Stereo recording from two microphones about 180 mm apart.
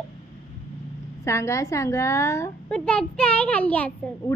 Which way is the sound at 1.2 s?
15° left (ahead or behind).